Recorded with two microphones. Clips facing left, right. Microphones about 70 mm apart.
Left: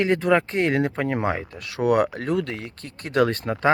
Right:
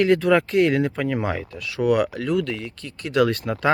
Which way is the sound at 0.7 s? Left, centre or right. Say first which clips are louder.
Right 1 dB; left.